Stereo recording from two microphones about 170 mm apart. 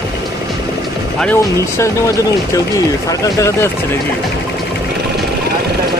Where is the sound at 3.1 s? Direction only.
20° left (ahead or behind).